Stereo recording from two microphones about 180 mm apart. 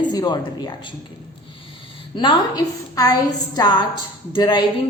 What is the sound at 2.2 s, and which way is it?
Speech, 25° left (ahead or behind).